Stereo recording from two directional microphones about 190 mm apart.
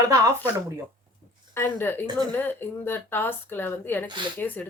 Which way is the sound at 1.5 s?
10° left (ahead or behind).